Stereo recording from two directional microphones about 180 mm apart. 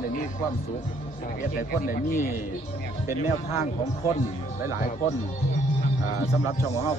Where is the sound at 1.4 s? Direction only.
50° left (ahead or behind).